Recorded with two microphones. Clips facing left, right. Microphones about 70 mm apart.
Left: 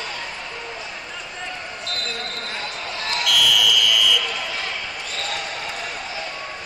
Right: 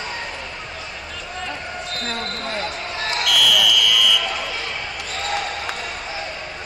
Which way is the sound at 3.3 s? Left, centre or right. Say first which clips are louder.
Right 1 dB; centre.